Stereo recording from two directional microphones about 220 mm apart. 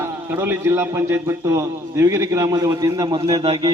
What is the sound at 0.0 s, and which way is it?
A man's voice, 10° right (ahead or behind).